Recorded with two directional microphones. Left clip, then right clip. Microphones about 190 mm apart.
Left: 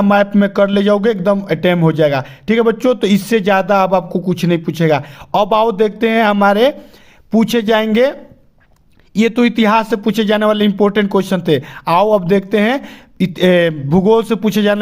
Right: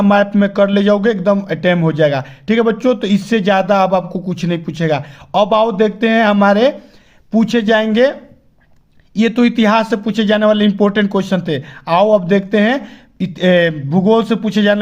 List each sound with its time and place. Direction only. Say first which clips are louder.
0.0 s a man's voice: even; 20° left (ahead or behind)